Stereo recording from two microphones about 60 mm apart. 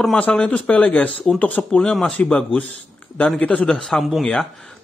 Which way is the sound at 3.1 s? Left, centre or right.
Left.